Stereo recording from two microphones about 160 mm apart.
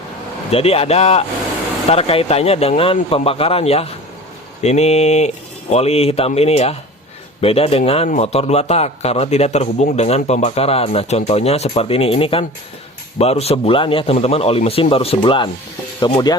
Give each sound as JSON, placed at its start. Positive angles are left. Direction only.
{"t": 0.5, "sound": "a man's voice", "side_deg": 40}